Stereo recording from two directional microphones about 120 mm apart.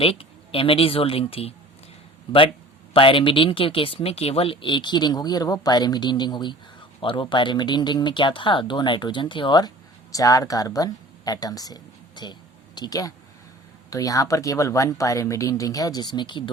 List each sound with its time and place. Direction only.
0.0 s speech: 50° left (ahead or behind)
2.9 s speech: 45° left (ahead or behind)